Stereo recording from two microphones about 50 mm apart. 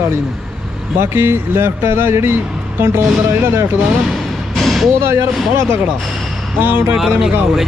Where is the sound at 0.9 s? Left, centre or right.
Right.